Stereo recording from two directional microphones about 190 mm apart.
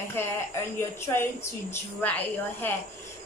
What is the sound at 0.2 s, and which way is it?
A woman's voice, 10° left (ahead or behind).